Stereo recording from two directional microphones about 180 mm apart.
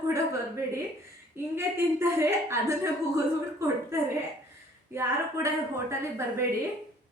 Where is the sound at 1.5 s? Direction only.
15° right (ahead or behind).